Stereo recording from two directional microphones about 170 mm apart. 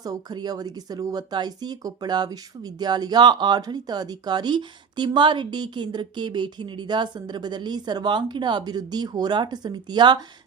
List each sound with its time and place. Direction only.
0.0 s speech: 25° right (ahead or behind)